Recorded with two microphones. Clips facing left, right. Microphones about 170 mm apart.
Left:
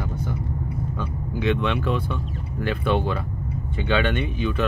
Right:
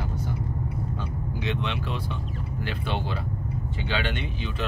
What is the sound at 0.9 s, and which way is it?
Speech, 55° left (ahead or behind).